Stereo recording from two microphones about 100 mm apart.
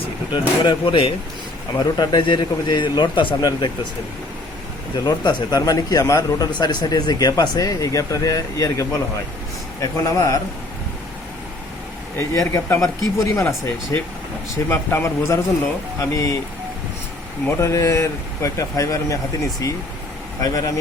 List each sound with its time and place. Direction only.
0.3 s speech: 55° left (ahead or behind)
1.8 s a man's voice: 50° left (ahead or behind)
5.0 s speech: 45° left (ahead or behind)
12.1 s speech: 25° left (ahead or behind)
17.6 s speech: 30° left (ahead or behind)